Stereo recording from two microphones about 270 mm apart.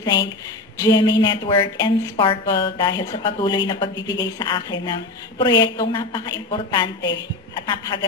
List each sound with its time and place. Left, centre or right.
0.0 s a woman's voice: centre